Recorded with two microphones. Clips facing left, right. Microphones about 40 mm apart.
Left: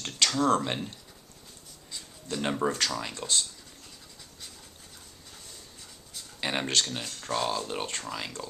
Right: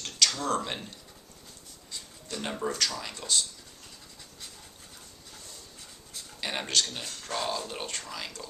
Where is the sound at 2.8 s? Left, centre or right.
Centre.